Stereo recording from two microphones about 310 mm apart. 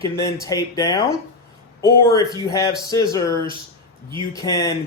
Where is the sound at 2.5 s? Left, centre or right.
Centre.